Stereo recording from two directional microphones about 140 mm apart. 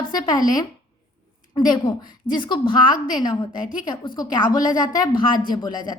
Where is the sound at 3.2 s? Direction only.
30° left (ahead or behind).